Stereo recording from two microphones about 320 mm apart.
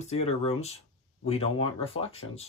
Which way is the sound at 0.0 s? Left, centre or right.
Centre.